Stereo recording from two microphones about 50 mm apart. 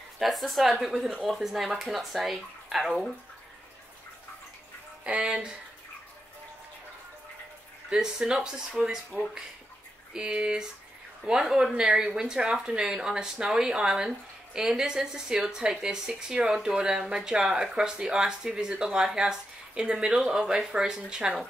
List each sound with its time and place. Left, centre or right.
0.2 s speech: centre
5.1 s speech: right
7.9 s speech: centre
10.1 s speech: centre